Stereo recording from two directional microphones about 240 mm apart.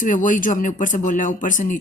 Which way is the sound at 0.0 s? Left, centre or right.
Left.